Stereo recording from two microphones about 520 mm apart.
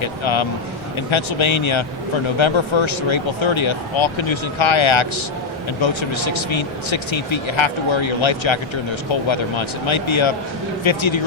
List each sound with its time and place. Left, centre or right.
0.0 s speech: left